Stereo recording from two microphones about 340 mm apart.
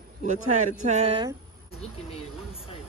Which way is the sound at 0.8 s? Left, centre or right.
Centre.